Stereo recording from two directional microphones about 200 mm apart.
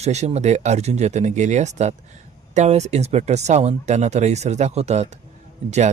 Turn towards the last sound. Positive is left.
turn(degrees=-35)  # may be behind; listen again after turning